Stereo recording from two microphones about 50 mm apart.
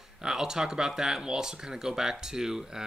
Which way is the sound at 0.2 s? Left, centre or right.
Centre.